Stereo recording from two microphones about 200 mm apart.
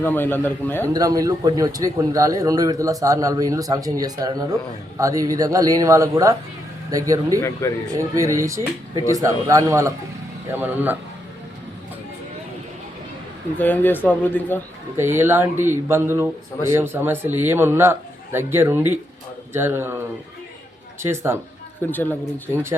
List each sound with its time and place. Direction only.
0.0 s speech: 10° left (ahead or behind)
0.9 s speech: 15° right (ahead or behind)
13.6 s speech: 10° left (ahead or behind)
14.9 s speech: 10° right (ahead or behind)
21.0 s speech: 15° right (ahead or behind)
21.8 s speech: 10° left (ahead or behind)